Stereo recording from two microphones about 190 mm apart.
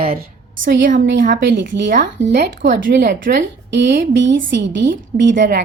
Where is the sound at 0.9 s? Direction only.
70° right (ahead or behind).